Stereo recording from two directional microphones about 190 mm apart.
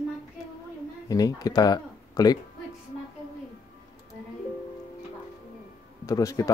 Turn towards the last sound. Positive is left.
turn(degrees=20)  # may be behind; listen again after turning